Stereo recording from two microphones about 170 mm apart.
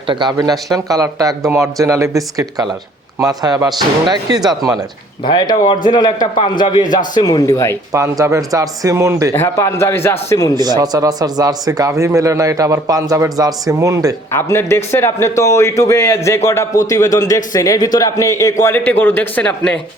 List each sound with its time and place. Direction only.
0.1 s speech: 25° right (ahead or behind)
5.2 s a man's voice: 25° left (ahead or behind)
7.9 s speech: 15° right (ahead or behind)
9.3 s a man's voice: 15° left (ahead or behind)
10.5 s speech: 25° right (ahead or behind)
14.3 s a man's voice: 15° left (ahead or behind)